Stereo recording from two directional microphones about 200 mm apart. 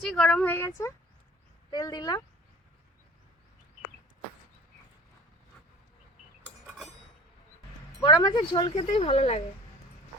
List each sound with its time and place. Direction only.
0.0 s a woman's voice: centre (ahead or behind)
1.7 s speech: 20° left (ahead or behind)
8.0 s speech: 20° left (ahead or behind)